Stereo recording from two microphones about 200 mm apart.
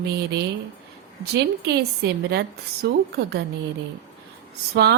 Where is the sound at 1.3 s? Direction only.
55° right (ahead or behind).